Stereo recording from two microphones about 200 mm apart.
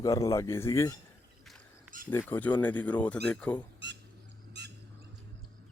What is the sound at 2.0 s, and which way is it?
Speech, 10° left (ahead or behind).